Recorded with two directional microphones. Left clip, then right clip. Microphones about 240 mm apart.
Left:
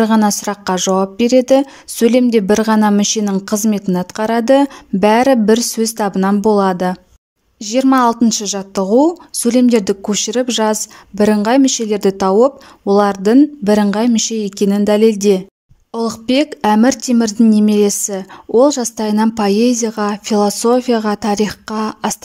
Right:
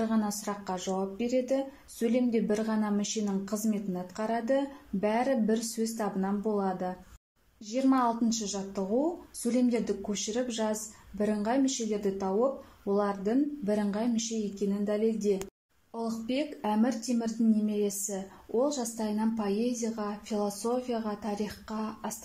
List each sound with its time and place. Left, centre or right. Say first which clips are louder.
0.1 s a woman's voice: left 18 dB; left